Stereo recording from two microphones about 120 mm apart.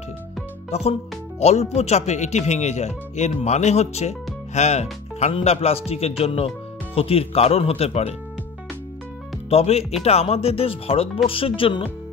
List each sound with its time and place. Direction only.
0.7 s speech: 60° left (ahead or behind)
9.5 s speech: 60° left (ahead or behind)